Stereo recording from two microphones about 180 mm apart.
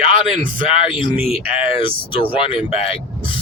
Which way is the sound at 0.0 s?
30° left (ahead or behind).